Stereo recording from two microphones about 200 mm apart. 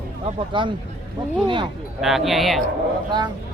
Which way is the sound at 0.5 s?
25° right (ahead or behind).